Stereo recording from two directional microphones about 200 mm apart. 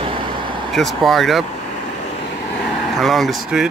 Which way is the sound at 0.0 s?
25° right (ahead or behind).